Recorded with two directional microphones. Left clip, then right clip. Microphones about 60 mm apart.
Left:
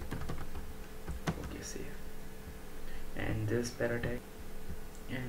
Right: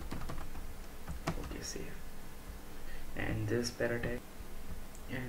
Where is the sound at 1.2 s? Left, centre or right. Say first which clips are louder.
Even; centre.